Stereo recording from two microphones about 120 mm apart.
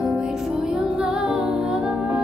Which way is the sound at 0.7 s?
5° right (ahead or behind).